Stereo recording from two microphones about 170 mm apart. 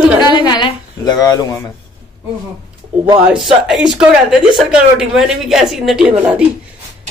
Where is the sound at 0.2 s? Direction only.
25° left (ahead or behind).